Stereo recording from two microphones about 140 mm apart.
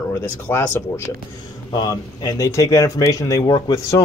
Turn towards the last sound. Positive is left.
turn(degrees=25)  # may be behind; listen again after turning